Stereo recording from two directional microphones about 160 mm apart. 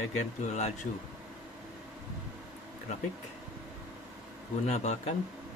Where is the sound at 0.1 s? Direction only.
45° left (ahead or behind).